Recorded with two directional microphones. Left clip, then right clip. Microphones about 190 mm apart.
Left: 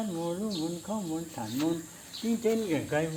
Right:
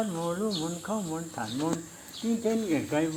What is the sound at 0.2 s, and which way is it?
Speech, centre (ahead or behind).